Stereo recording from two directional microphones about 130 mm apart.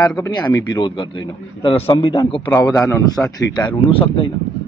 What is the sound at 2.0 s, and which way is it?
Speech, 35° left (ahead or behind).